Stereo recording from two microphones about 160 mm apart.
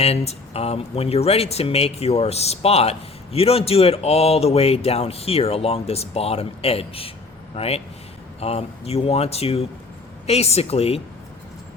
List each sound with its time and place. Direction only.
0.0 s speech: 40° left (ahead or behind)